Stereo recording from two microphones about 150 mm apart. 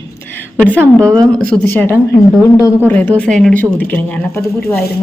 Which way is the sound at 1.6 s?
15° left (ahead or behind).